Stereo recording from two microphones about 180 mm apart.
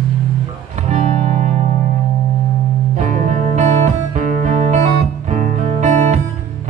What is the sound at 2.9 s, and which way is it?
Music, 45° right (ahead or behind).